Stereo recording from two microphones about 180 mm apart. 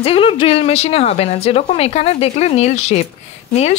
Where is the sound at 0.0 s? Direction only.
30° left (ahead or behind).